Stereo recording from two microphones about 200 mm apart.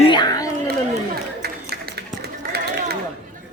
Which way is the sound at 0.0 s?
20° left (ahead or behind).